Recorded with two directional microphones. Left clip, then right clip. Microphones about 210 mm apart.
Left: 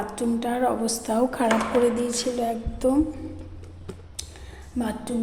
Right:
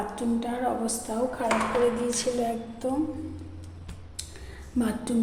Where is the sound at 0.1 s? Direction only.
25° left (ahead or behind).